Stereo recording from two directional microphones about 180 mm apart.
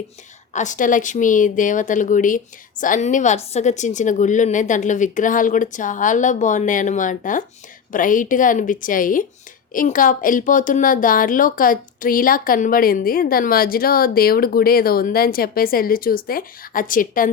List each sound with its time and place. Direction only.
0.5 s a woman's voice: 45° left (ahead or behind)